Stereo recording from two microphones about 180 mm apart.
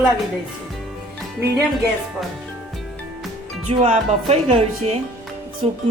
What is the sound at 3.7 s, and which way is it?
Speech, 35° right (ahead or behind).